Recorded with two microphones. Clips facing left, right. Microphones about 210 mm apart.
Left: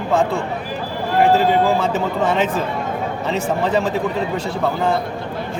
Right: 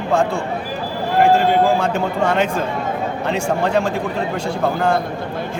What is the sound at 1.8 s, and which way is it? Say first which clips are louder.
Speech: even; 5° left (ahead or behind).